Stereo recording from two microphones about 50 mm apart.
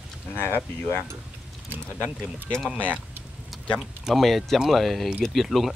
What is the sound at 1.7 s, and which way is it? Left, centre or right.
Speech, right.